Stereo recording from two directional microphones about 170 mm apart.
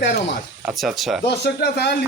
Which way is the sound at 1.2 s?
80° left.